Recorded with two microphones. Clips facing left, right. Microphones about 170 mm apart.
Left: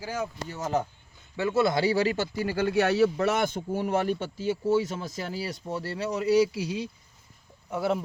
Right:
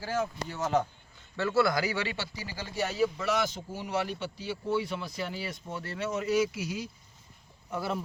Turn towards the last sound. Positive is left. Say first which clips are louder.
# left 6 dB
turn(degrees=20)  # may be behind; listen again after turning